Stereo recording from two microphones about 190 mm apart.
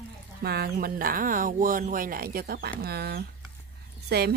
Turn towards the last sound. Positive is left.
turn(degrees=-60)  # may be behind; listen again after turning